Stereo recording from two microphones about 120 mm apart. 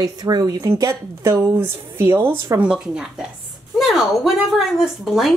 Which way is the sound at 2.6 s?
5° right (ahead or behind).